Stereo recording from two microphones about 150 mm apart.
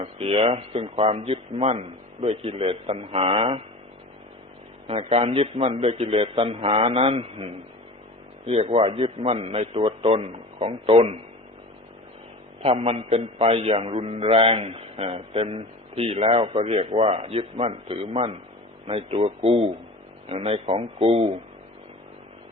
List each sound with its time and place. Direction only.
0.0 s a man's voice: 40° right (ahead or behind)
4.9 s a man's voice: 40° right (ahead or behind)
12.6 s a man's voice: 40° right (ahead or behind)